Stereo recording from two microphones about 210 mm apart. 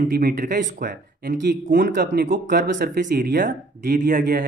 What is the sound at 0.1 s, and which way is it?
Speech, 45° right (ahead or behind).